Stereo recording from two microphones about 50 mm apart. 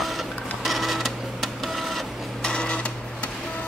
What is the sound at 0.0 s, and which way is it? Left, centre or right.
Printer, centre.